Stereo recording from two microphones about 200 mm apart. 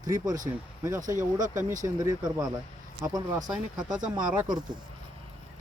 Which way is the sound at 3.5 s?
5° right (ahead or behind).